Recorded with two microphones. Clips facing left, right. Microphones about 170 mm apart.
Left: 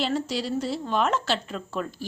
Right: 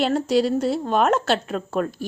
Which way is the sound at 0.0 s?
55° right (ahead or behind).